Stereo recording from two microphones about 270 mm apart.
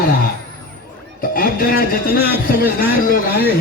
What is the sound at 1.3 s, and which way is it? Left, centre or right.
Speech, left.